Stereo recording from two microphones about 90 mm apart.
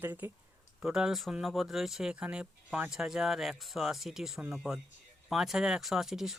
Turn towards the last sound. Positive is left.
turn(degrees=-5)  # may be behind; listen again after turning